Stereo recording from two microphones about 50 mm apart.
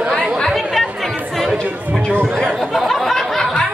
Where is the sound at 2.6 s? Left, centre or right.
Centre.